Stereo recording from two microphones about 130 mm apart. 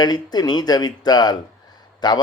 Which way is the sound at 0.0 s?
30° left (ahead or behind).